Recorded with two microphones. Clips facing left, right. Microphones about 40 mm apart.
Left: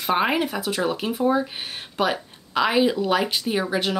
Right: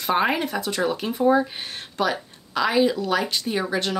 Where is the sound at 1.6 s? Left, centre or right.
Centre.